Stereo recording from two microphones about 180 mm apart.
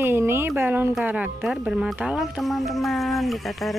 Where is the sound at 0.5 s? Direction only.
10° right (ahead or behind).